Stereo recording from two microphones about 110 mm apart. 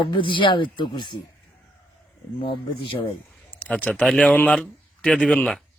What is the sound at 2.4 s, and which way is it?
Speech, 50° left (ahead or behind).